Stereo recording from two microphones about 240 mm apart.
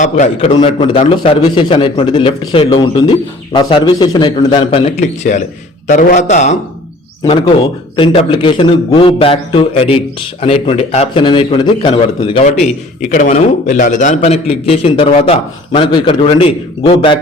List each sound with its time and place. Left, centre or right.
0.0 s a man's voice: left